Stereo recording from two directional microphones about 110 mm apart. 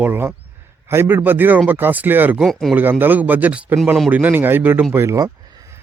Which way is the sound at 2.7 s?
20° right (ahead or behind).